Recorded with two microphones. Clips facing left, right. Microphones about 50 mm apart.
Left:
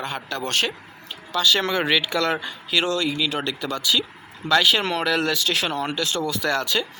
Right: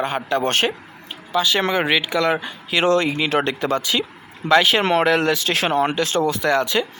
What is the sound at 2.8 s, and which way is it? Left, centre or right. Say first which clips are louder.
Speech: right 6 dB; right.